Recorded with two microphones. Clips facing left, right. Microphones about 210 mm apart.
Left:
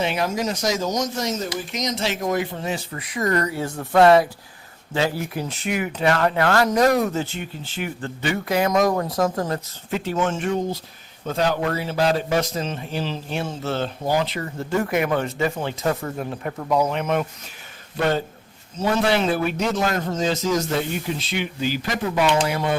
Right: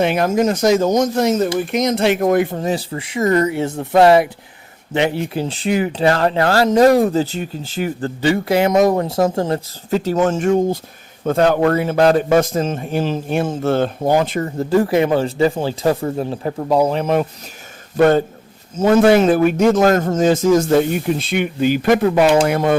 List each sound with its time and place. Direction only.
0.0 s speech: 55° right (ahead or behind); by 10.0 s 25° right (ahead or behind)
10.0 s a man's voice: 40° right (ahead or behind)
17.9 s a man's voice: 50° right (ahead or behind)